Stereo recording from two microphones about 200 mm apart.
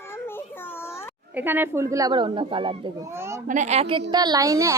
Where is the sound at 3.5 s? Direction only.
35° right (ahead or behind); by 4.7 s 15° right (ahead or behind).